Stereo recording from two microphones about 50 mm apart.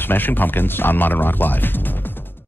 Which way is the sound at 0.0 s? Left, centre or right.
Left.